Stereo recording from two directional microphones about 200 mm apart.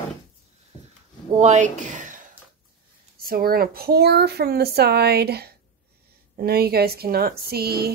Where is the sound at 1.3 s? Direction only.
35° right (ahead or behind).